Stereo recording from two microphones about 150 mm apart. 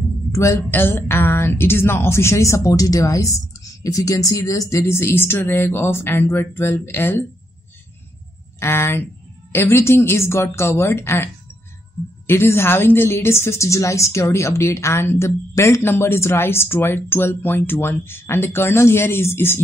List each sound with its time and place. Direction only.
0.3 s a woman's voice: 20° left (ahead or behind)
8.5 s a woman's voice: 15° left (ahead or behind)
12.3 s a woman's voice: 15° left (ahead or behind)